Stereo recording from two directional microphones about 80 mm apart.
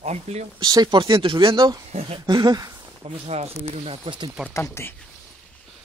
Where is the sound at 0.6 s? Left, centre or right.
Right.